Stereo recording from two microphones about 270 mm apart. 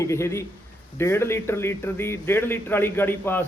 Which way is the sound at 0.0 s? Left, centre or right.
Centre.